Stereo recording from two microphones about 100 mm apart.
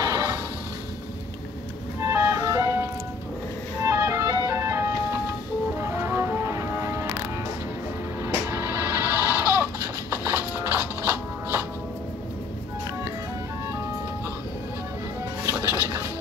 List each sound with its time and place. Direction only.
0.0 s music: 35° right (ahead or behind)
2.0 s music: 25° right (ahead or behind)
8.3 s music: 25° right (ahead or behind)